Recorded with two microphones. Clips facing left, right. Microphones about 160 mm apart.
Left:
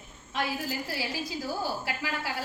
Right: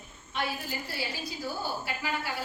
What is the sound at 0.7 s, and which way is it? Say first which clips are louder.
A woman's voice: left 3 dB; 90° left.